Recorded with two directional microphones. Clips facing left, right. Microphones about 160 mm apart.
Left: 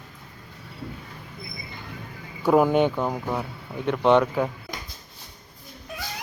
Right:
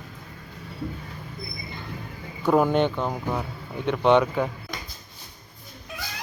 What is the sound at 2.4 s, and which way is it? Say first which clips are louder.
Speech: left 2 dB; 10° left (ahead or behind).